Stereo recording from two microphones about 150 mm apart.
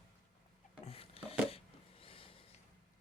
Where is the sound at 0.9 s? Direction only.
40° left (ahead or behind).